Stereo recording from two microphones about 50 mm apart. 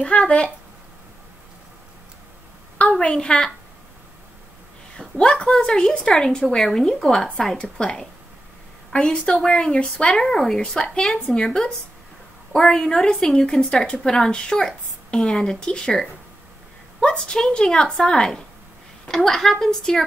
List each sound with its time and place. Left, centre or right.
0.0 s a woman's voice: left
3.0 s speech: centre
4.9 s a woman's voice: centre